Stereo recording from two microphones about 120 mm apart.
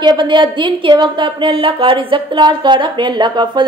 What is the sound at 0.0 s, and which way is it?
A woman's voice, 35° right (ahead or behind).